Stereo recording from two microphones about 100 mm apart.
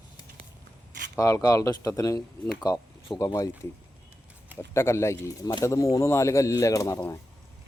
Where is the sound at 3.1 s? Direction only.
Centre (ahead or behind).